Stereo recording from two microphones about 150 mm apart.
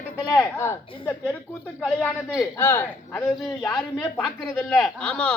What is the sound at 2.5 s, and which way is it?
Speech, 15° left (ahead or behind).